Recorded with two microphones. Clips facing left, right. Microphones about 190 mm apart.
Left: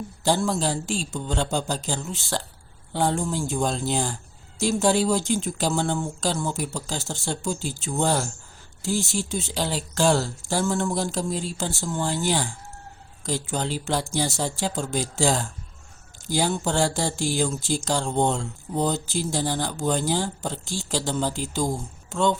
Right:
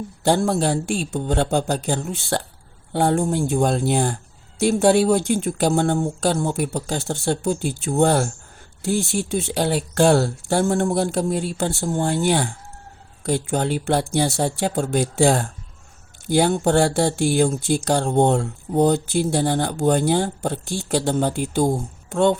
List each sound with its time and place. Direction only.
0.3 s speech: 60° right (ahead or behind)